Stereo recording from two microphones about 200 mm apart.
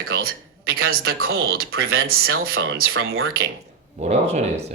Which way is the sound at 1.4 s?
50° right (ahead or behind).